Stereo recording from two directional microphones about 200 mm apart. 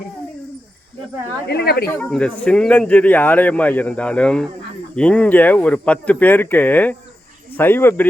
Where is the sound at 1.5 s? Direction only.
50° left (ahead or behind).